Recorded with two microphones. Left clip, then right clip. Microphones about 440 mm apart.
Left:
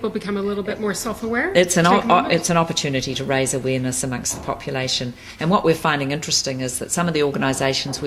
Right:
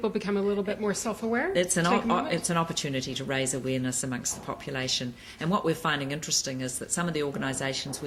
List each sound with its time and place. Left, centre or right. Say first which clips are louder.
0.0 s a man's voice: left 4 dB; right
1.5 s speech: left 13 dB; left